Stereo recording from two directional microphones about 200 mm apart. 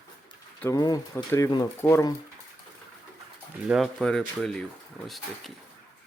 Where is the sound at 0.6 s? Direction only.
15° left (ahead or behind).